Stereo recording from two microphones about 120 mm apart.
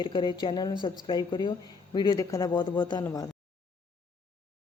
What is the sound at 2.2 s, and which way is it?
Speech, 30° left (ahead or behind).